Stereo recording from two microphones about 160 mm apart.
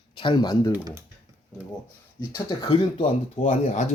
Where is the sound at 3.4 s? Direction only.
45° left (ahead or behind).